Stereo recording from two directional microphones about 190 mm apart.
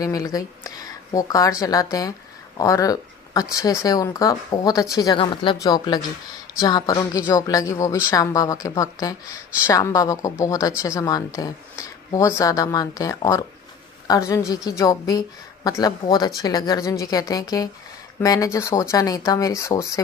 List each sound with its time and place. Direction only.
0.0 s a woman's voice: 20° left (ahead or behind)